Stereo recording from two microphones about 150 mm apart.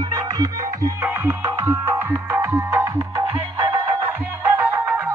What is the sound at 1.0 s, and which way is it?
Music, 15° right (ahead or behind).